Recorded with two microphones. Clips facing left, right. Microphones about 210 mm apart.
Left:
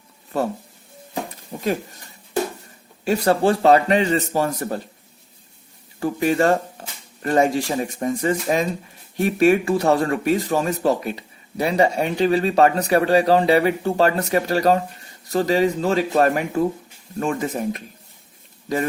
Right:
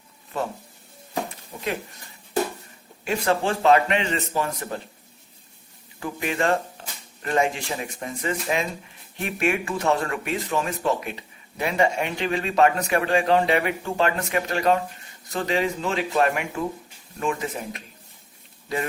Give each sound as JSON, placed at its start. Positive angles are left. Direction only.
{"t": 1.6, "sound": "speech", "side_deg": 40}
{"t": 3.0, "sound": "speech", "side_deg": 40}
{"t": 6.0, "sound": "speech", "side_deg": 40}